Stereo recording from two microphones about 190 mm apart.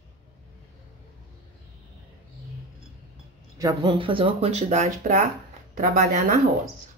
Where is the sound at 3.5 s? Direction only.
20° right (ahead or behind); by 6.2 s 45° right (ahead or behind).